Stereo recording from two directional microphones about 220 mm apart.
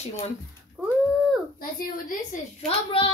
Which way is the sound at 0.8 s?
5° right (ahead or behind).